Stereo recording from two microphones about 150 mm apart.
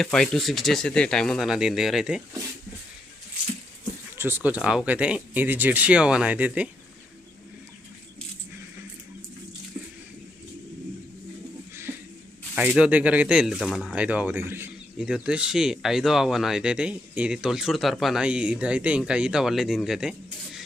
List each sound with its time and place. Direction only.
0.0 s speech: 5° left (ahead or behind)
4.1 s speech: 15° right (ahead or behind)
11.7 s a sound: 15° right (ahead or behind)
12.5 s speech: 10° right (ahead or behind)